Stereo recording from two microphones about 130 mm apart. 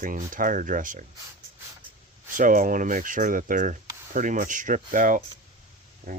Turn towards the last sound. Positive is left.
turn(degrees=-90)